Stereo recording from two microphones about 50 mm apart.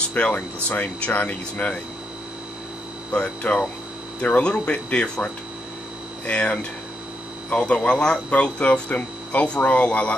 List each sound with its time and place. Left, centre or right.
0.3 s speech: left
3.1 s speech: left
6.2 s speech: left